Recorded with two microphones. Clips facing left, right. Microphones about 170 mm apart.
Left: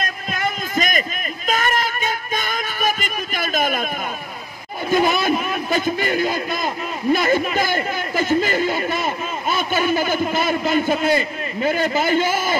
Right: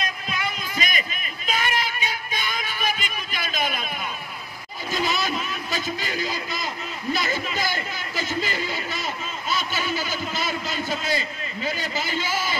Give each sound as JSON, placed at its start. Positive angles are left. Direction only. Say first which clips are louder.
{"t": 0.0, "sound": "a sound", "louder": "left 5 dB", "side_deg": 50}
{"t": 1.5, "sound": "music", "louder": "left 5 dB", "side_deg": 45}
{"t": 4.9, "sound": "a man's voice", "louder": "left 8 dB", "side_deg": 55}